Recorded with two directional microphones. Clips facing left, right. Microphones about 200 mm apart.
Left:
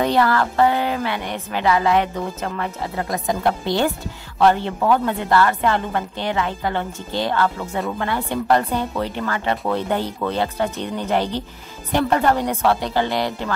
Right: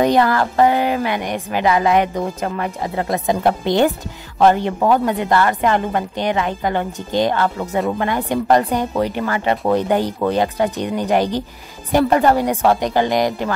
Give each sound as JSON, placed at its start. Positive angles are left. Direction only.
{"t": 0.0, "sound": "a woman's voice", "side_deg": -15}